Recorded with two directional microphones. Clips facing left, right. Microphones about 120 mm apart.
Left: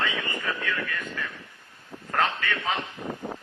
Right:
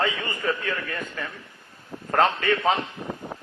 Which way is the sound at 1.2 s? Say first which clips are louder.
Right 2 dB; 35° right (ahead or behind).